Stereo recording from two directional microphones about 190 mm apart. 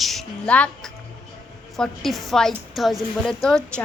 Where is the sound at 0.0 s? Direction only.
Centre (ahead or behind).